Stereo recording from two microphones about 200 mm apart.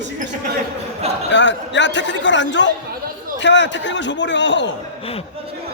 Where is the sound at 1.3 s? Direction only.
65° left (ahead or behind).